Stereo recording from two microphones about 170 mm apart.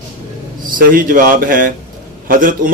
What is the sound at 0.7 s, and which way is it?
A man's voice, 55° right (ahead or behind).